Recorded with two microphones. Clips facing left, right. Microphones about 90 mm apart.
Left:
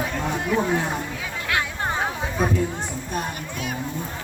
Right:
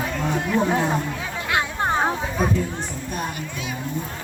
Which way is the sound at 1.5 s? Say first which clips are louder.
Right 3 dB; 20° right (ahead or behind).